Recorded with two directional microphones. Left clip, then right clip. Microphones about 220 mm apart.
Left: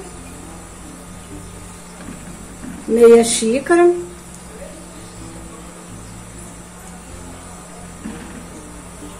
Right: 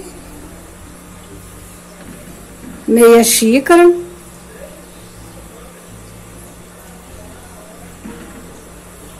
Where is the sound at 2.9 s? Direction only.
45° right (ahead or behind).